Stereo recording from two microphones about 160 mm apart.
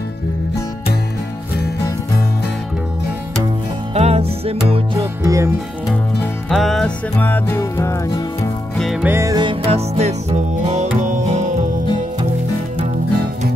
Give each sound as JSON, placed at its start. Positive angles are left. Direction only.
{"t": 3.9, "sound": "music", "side_deg": -40}
{"t": 4.9, "sound": "music", "side_deg": -20}
{"t": 6.5, "sound": "music", "side_deg": 0}
{"t": 8.7, "sound": "music", "side_deg": 0}
{"t": 9.0, "sound": "music", "side_deg": -15}